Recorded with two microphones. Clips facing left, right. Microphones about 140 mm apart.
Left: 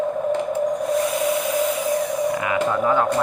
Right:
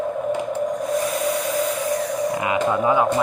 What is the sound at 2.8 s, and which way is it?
Speech, 10° right (ahead or behind).